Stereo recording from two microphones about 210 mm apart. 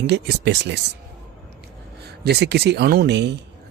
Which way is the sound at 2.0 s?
50° right (ahead or behind).